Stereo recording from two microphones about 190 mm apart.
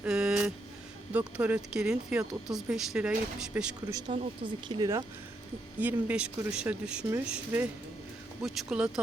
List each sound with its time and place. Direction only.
0.0 s vehicle: 5° right (ahead or behind)
1.4 s speech: 5° right (ahead or behind)
3.8 s speech: 20° right (ahead or behind)
5.8 s speech: 5° right (ahead or behind)